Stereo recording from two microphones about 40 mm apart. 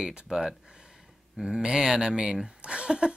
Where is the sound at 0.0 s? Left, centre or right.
Centre.